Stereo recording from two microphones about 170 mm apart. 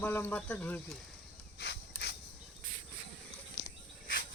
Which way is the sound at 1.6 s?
75° left (ahead or behind).